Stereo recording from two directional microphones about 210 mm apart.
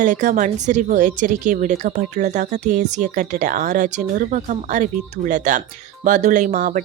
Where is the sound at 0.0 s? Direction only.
40° right (ahead or behind).